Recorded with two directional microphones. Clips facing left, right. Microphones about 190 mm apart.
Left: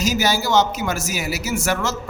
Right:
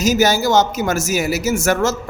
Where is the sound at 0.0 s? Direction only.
45° right (ahead or behind).